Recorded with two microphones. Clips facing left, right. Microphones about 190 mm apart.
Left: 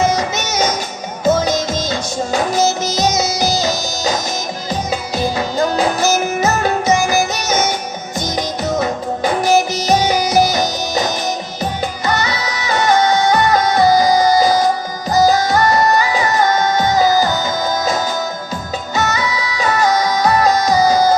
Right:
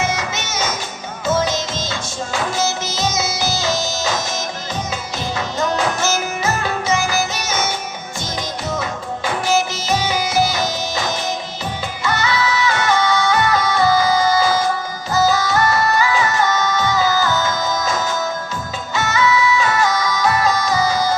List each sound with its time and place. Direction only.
0.0 s music: 40° left (ahead or behind)
1.3 s music: 15° left (ahead or behind)
1.9 s music: 40° left (ahead or behind)
12.2 s music: 40° left (ahead or behind)